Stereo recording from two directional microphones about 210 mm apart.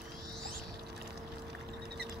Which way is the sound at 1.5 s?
50° right (ahead or behind).